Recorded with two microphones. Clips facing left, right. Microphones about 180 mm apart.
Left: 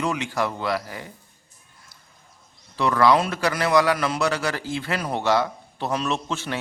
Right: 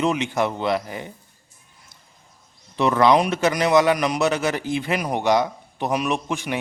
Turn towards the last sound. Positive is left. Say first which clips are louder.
# right 2 dB
turn(degrees=-15)  # may be behind; listen again after turning